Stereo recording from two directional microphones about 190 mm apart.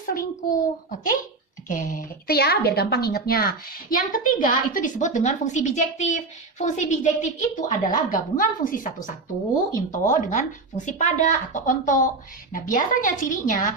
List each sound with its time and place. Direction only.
0.0 s a child's voice: 45° left (ahead or behind)